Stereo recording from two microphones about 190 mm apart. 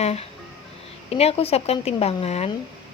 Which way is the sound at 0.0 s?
30° left (ahead or behind).